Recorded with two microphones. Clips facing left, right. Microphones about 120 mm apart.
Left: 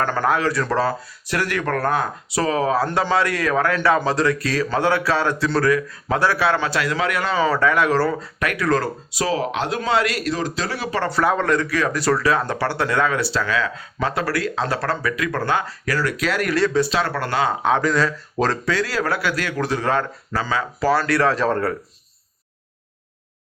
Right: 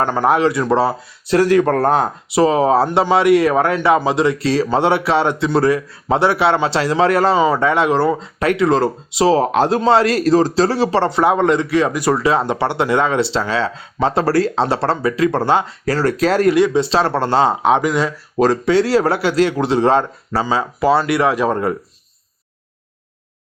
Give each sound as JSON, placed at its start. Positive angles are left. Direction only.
{"t": 0.1, "sound": "a man's voice", "side_deg": -20}
{"t": 7.3, "sound": "a man's voice", "side_deg": -20}
{"t": 9.4, "sound": "a man's voice", "side_deg": -40}
{"t": 16.5, "sound": "a man's voice", "side_deg": -20}
{"t": 18.6, "sound": "a man's voice", "side_deg": -25}